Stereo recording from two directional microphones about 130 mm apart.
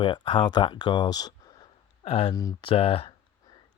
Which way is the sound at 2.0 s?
45° left (ahead or behind).